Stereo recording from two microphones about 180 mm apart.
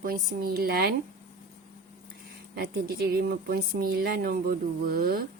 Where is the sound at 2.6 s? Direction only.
65° right (ahead or behind).